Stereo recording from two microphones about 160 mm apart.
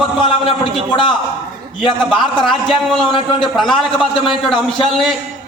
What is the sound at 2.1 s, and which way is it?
A man's voice, 5° left (ahead or behind).